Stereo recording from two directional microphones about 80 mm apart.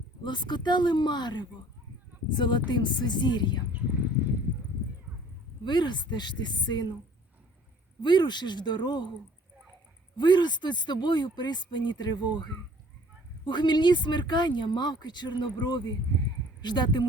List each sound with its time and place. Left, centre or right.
0.3 s speech: left
3.7 s a sound: right
5.6 s speech: left
8.0 s speech: left
10.2 s speech: left